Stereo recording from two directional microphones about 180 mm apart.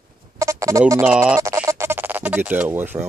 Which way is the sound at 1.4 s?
15° right (ahead or behind).